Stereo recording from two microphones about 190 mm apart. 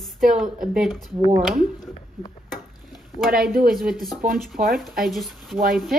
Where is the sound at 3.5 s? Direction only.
50° right (ahead or behind).